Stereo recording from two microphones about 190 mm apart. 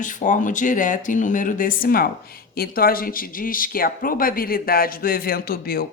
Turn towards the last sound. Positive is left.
turn(degrees=50)  # may be behind; listen again after turning